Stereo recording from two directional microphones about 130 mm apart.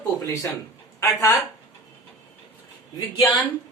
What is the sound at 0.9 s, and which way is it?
Speech, 25° left (ahead or behind).